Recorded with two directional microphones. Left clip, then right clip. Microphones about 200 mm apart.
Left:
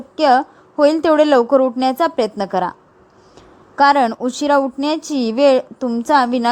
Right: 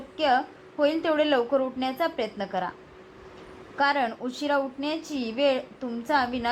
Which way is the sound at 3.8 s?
60° left (ahead or behind).